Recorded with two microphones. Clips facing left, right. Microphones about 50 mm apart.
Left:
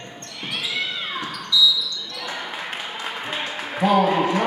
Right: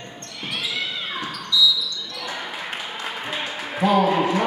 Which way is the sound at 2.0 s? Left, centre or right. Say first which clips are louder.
Even; centre.